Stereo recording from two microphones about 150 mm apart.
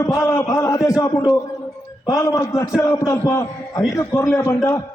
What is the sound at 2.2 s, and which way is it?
A man's voice, 20° left (ahead or behind).